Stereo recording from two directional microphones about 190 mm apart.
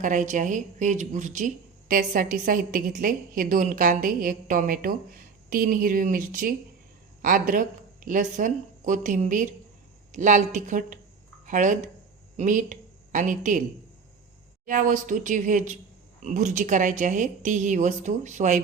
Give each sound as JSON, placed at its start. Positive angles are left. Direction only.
{"t": 0.0, "sound": "a woman's voice", "side_deg": -40}
{"t": 14.7, "sound": "a woman's voice", "side_deg": -45}